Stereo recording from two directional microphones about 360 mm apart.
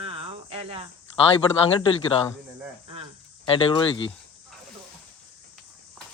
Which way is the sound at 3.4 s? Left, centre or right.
Centre.